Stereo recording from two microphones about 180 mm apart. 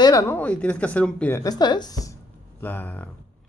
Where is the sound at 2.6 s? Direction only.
10° left (ahead or behind).